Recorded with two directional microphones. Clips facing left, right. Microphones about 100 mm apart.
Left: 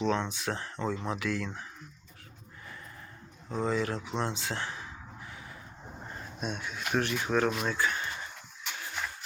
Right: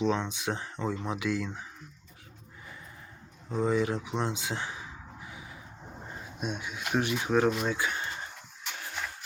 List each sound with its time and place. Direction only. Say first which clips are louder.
0.0 s speech: right 1 dB; 15° right (ahead or behind)
3.5 s speech: right 3 dB; 15° right (ahead or behind)